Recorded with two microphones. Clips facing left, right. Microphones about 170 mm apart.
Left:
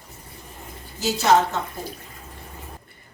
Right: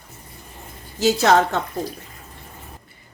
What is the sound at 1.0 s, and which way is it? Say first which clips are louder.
Speech: right 3 dB; 70° right (ahead or behind).